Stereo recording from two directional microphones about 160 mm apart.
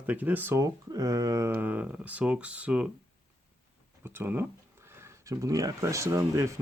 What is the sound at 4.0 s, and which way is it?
Speech, 15° right (ahead or behind).